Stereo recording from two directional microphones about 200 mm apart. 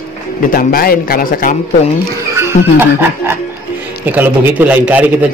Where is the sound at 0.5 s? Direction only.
45° left (ahead or behind).